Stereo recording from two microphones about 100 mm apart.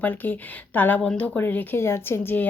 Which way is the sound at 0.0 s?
20° left (ahead or behind).